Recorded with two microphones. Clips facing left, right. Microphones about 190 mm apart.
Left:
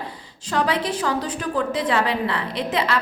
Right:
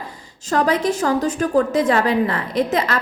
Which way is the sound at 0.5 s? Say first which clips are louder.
Right 4 dB; 45° right (ahead or behind).